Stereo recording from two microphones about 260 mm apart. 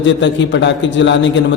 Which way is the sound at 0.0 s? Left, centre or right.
Left.